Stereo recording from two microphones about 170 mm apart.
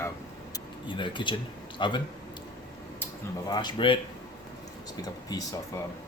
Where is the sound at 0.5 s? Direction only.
30° left (ahead or behind).